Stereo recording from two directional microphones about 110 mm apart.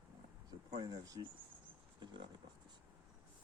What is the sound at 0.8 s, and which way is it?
Speech, 35° right (ahead or behind).